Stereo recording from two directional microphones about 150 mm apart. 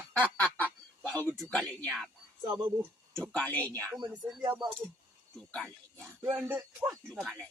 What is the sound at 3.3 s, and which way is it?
Speech, 10° left (ahead or behind).